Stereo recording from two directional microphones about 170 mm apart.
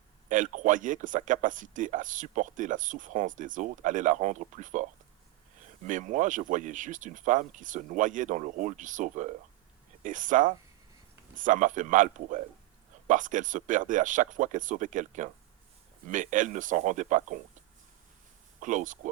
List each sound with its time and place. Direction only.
0.3 s speech: 50° right (ahead or behind)
18.6 s speech: 50° right (ahead or behind)